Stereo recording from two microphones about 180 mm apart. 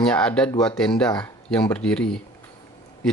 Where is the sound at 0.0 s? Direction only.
5° left (ahead or behind).